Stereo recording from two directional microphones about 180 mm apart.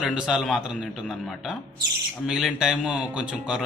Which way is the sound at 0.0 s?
5° right (ahead or behind).